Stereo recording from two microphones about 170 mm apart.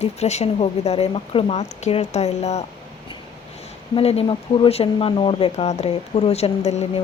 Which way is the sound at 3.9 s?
35° left (ahead or behind).